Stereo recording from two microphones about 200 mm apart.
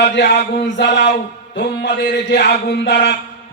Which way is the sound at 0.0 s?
60° left (ahead or behind).